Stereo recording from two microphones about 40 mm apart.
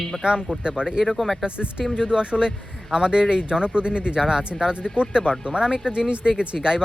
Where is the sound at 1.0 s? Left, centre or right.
Centre.